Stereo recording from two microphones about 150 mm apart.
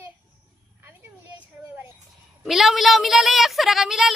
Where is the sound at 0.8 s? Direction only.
15° right (ahead or behind).